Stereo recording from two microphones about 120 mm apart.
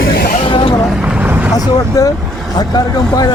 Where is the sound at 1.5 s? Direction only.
30° left (ahead or behind).